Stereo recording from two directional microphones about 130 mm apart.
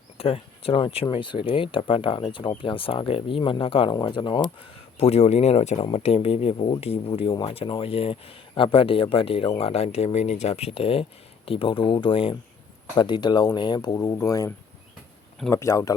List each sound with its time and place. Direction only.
0.2 s speech: 50° left (ahead or behind)
4.9 s speech: 50° left (ahead or behind); by 15.9 s 25° left (ahead or behind)